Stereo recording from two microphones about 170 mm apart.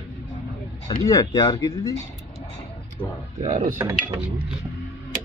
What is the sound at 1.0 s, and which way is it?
Speech, 20° left (ahead or behind).